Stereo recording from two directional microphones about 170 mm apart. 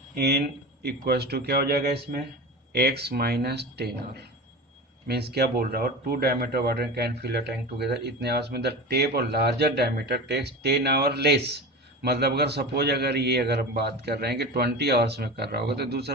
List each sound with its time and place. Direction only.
0.1 s speech: 75° right (ahead or behind)